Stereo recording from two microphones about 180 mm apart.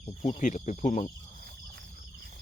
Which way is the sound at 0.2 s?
40° left (ahead or behind).